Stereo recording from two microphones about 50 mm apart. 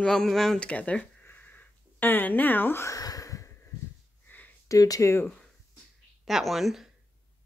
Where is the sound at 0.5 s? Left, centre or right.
Left.